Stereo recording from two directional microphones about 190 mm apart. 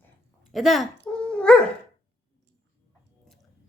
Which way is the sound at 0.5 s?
Centre (ahead or behind).